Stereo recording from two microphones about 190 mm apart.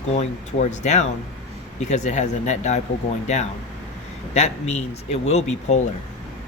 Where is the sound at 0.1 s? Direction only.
35° left (ahead or behind).